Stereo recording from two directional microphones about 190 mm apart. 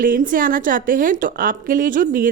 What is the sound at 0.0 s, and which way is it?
A woman's voice, 45° right (ahead or behind).